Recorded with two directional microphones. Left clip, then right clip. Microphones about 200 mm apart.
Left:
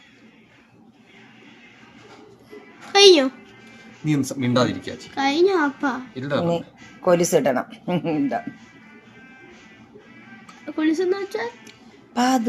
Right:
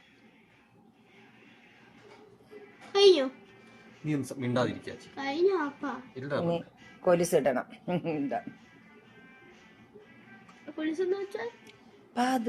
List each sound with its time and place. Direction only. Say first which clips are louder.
2.9 s a woman's voice: left 9 dB; 45° left (ahead or behind)
4.0 s speech: left 10 dB; 10° left (ahead or behind)
5.1 s a child's voice: left 9 dB; 50° left (ahead or behind)
6.1 s speech: left 5 dB; centre (ahead or behind)
10.8 s speech: left 9 dB; 40° left (ahead or behind)
12.1 s a woman's voice: left 8 dB; centre (ahead or behind)